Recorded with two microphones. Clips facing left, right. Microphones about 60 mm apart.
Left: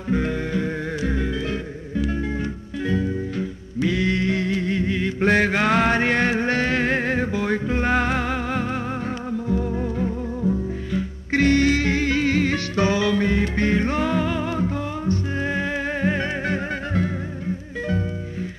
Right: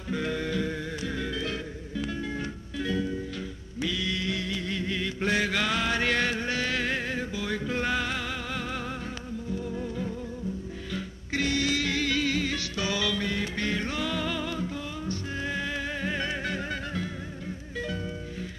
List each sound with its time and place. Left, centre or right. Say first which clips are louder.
0.1 s music: left 6 dB; left
2.8 s music: left 6 dB; left
3.9 s mantra: left 9 dB; left
5.2 s mantra: left 8 dB; left
6.0 s music: left 7 dB; left
7.6 s music: left 6 dB; left
7.9 s music: left 8 dB; left
9.8 s music: left 8 dB; left
12.9 s music: left 6 dB; left